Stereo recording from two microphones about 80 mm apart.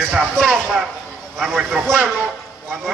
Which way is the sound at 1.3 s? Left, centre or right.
Centre.